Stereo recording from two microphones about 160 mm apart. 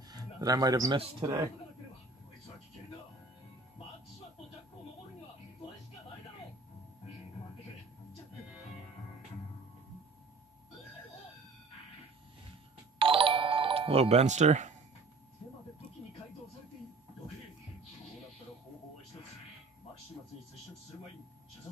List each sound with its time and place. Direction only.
0.1 s a man's voice: 25° right (ahead or behind)
13.0 s music: 35° right (ahead or behind)